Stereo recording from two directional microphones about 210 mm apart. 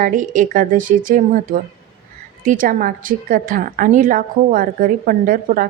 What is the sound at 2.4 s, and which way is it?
A woman's voice, 40° right (ahead or behind).